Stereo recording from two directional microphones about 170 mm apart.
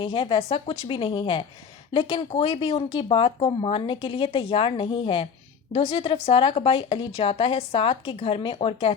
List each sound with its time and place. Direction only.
0.0 s speech: 30° left (ahead or behind)